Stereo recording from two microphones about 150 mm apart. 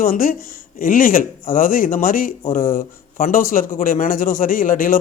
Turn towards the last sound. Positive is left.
turn(degrees=65)  # may be behind; listen again after turning